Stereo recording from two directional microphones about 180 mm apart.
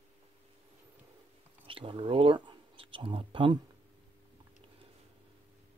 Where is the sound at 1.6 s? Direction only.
30° right (ahead or behind).